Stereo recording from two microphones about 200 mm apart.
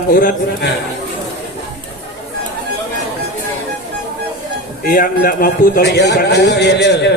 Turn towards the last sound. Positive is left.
turn(degrees=60)  # may be behind; listen again after turning